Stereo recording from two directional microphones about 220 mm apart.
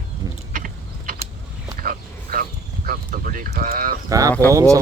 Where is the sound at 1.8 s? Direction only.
40° right (ahead or behind).